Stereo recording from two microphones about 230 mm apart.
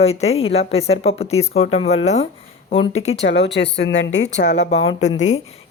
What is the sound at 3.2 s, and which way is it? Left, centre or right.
Speech, left.